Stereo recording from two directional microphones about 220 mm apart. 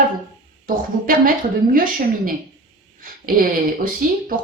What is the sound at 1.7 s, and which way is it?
Speech, 40° right (ahead or behind).